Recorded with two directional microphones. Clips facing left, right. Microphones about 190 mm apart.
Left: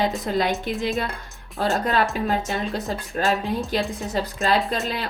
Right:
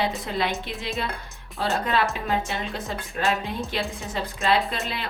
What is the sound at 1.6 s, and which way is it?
Speech, 45° left (ahead or behind).